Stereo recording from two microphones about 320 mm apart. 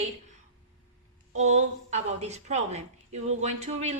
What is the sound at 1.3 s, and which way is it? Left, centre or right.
A woman's voice, right.